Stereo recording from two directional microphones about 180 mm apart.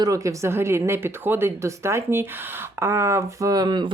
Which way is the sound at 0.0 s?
20° right (ahead or behind).